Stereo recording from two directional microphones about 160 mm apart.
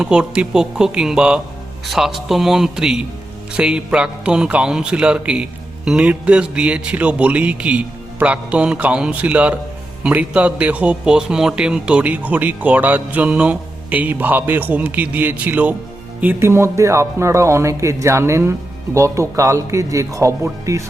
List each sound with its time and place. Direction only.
0.0 s a man's voice: 5° right (ahead or behind)